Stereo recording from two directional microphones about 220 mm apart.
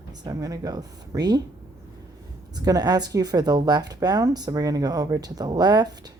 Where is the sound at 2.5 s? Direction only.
20° right (ahead or behind).